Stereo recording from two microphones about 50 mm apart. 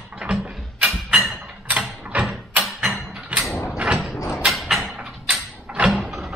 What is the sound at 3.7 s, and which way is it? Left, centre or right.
Mechanisms, centre.